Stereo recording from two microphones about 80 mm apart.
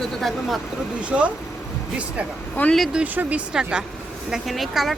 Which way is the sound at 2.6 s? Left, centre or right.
Left.